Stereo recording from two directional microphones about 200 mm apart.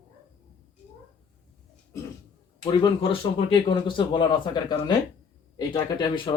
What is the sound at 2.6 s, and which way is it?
Speech, 20° left (ahead or behind).